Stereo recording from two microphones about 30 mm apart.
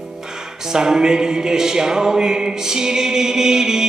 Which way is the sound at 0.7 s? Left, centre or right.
Right.